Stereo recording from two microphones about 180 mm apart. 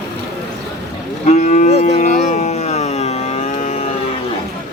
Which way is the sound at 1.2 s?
40° left (ahead or behind).